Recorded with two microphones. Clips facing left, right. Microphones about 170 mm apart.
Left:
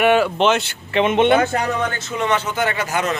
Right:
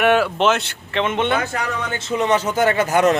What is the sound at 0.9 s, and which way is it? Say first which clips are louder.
Speech: left 5 dB; 15° left (ahead or behind).